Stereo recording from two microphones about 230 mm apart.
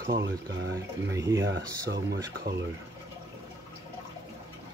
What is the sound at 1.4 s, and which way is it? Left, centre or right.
Speech, right.